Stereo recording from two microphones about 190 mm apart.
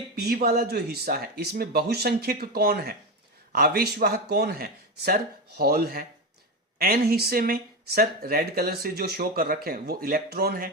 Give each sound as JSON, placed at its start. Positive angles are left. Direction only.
{"t": 0.2, "sound": "speech", "side_deg": -55}